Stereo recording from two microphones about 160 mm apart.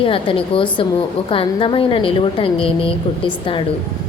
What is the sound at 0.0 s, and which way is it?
Speech, 35° left (ahead or behind).